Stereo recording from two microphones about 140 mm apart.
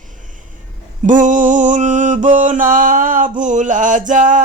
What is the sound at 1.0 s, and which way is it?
Mantra, 65° right (ahead or behind).